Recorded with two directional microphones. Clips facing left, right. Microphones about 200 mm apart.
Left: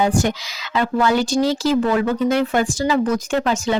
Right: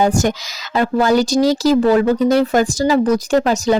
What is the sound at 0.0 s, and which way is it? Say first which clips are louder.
Speech: right 3 dB; 45° right (ahead or behind).